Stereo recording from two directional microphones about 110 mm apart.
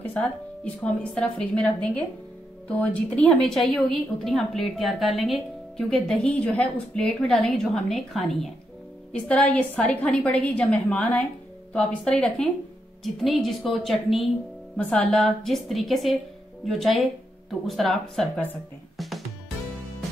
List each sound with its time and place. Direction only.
0.0 s a sound: 15° left (ahead or behind)
0.8 s a woman's voice: 10° left (ahead or behind)
9.1 s a woman's voice: 15° left (ahead or behind)
18.9 s music: centre (ahead or behind)